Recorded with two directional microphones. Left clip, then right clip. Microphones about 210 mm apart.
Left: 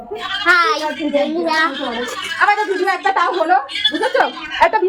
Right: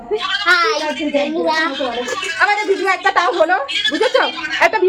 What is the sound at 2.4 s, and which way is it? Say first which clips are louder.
A woman's voice: left 1 dB; 40° right (ahead or behind).